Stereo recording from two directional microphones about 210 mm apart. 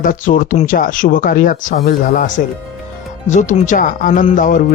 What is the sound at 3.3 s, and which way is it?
Speech, 35° left (ahead or behind).